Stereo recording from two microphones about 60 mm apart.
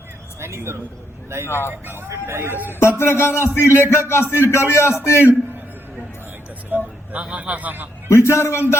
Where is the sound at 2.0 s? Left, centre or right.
Right.